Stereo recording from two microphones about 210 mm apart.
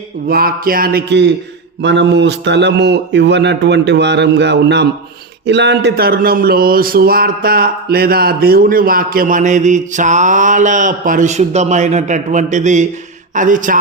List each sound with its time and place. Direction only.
0.3 s speech: 45° right (ahead or behind)